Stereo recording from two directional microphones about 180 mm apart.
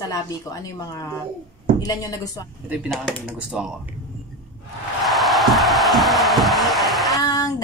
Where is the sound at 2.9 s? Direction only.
Centre (ahead or behind).